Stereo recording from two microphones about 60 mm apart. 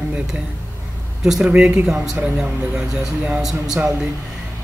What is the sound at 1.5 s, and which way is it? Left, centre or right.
Speech, right.